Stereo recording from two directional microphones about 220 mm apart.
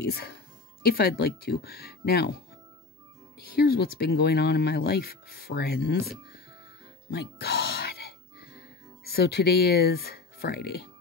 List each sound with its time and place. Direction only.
0.0 s speech: 45° left (ahead or behind)
3.3 s speech: 45° left (ahead or behind)
7.1 s music: 45° left (ahead or behind)